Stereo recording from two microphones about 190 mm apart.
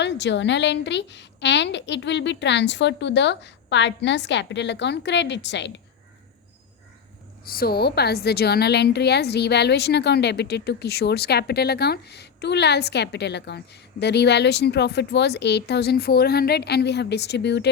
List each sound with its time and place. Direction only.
0.0 s a woman's voice: 65° left (ahead or behind)
7.5 s a woman's voice: 55° left (ahead or behind)